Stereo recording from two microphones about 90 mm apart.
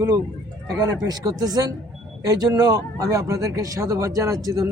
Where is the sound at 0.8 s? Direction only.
45° right (ahead or behind).